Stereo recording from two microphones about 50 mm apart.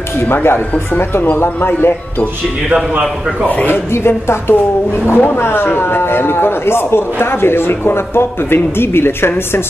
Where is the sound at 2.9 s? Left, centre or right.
Right.